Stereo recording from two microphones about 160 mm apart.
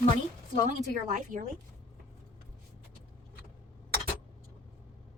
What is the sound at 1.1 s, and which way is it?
Speech, 55° right (ahead or behind).